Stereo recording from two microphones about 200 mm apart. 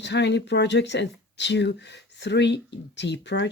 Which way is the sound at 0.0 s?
60° left (ahead or behind).